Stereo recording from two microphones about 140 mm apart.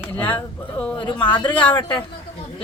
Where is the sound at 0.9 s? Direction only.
35° left (ahead or behind).